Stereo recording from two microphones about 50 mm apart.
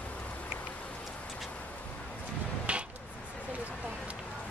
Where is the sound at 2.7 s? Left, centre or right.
Right.